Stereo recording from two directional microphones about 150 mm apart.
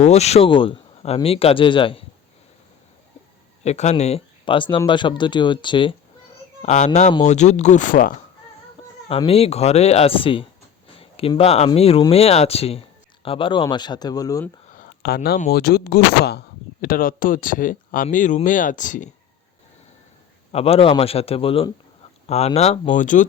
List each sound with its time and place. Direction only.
0.0 s speech: 45° left (ahead or behind)
3.6 s speech: 45° left (ahead or behind)
6.6 s speech: 55° left (ahead or behind)
9.0 s speech: 40° left (ahead or behind); by 14.4 s 25° left (ahead or behind)
14.7 s a sound: 70° left (ahead or behind); by 15.4 s 90° left
15.4 s speech: 90° left
16.8 s speech: 70° left (ahead or behind)
20.5 s speech: 40° left (ahead or behind); by 23.2 s 60° left (ahead or behind)